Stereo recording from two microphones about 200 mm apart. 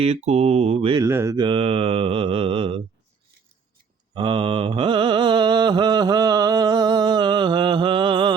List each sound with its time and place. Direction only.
0.0 s speech: 30° right (ahead or behind)
1.0 s mantra: 15° right (ahead or behind)
4.1 s mantra: 25° right (ahead or behind)